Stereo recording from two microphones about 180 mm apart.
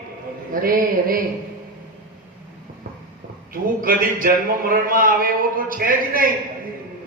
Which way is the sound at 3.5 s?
50° right (ahead or behind).